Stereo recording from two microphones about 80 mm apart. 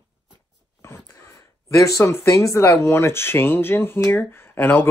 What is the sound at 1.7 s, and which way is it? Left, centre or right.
Speech, left.